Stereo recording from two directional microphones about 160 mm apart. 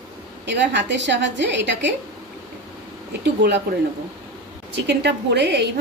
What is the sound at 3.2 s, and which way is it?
Speech, 90° right.